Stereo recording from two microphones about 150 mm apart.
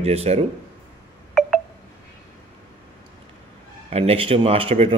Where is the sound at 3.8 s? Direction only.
45° right (ahead or behind).